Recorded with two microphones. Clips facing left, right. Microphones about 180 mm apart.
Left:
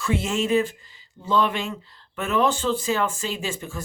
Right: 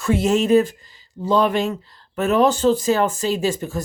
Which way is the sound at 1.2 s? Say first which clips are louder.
Right 5 dB; 40° right (ahead or behind).